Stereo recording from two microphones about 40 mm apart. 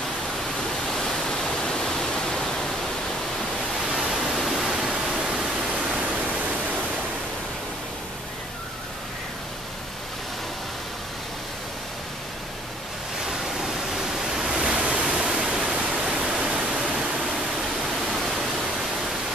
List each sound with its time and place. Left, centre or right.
0.6 s pink noise: centre
3.9 s pink noise: centre
5.7 s pink noise: right
13.2 s pink noise: centre
14.6 s pink noise: right
15.5 s pink noise: right
16.6 s waterfall: centre